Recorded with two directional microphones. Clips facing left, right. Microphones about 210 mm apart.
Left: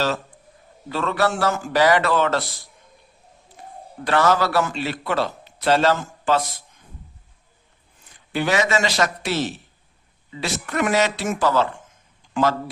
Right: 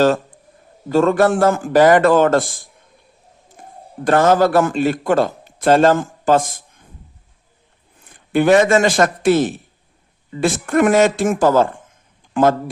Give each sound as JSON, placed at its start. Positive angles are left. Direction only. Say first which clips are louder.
{"t": 0.9, "sound": "a man's voice", "louder": "right 9 dB", "side_deg": -45}
{"t": 8.1, "sound": "a man's voice", "louder": "right 9 dB", "side_deg": -50}